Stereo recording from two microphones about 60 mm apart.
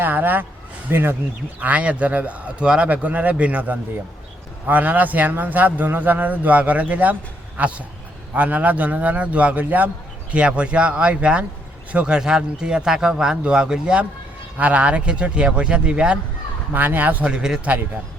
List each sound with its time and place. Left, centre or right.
0.0 s a man's voice: right
1.5 s a man's voice: right
10.3 s a man's voice: centre
16.7 s speech: right
17.2 s a man's voice: centre